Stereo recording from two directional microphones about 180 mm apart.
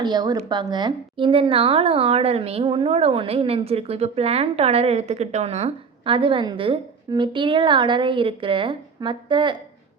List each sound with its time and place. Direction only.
0.0 s a woman's voice: 25° right (ahead or behind)